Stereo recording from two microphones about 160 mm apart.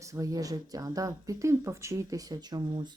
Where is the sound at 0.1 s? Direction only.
20° right (ahead or behind).